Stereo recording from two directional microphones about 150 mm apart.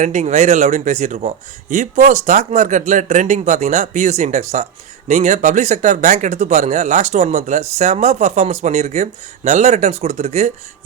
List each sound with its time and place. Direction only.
0.0 s speech: 50° right (ahead or behind)